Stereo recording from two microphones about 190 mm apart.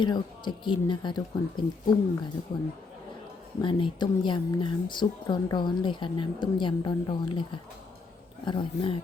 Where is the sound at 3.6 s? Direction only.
25° left (ahead or behind).